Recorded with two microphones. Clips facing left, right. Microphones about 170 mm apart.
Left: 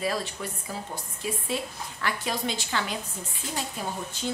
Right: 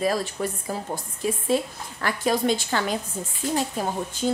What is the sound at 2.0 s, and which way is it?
Speech, 45° right (ahead or behind).